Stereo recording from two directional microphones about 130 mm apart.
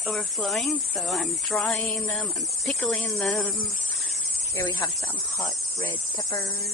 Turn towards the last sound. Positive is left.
turn(degrees=25)  # may be behind; listen again after turning